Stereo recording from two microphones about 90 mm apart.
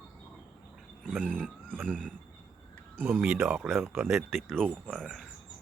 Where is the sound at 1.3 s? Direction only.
10° left (ahead or behind).